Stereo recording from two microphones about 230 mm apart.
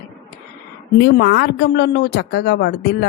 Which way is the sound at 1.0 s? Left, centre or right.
Left.